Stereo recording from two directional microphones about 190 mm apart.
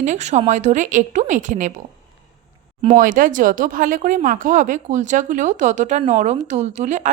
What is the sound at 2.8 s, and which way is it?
A woman's voice, 45° right (ahead or behind).